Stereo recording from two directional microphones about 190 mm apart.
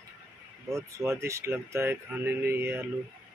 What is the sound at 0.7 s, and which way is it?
Speech, 15° right (ahead or behind).